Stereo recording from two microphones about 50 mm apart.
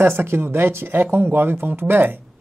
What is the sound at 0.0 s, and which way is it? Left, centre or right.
Speech, right.